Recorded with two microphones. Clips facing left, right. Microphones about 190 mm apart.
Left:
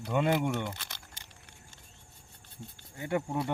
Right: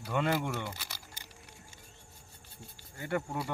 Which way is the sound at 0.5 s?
5° right (ahead or behind).